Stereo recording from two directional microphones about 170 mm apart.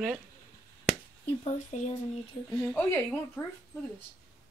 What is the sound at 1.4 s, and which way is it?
Speech, 40° left (ahead or behind).